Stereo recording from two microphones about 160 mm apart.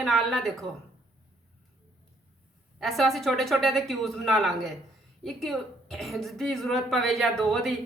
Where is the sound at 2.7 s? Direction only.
Centre (ahead or behind).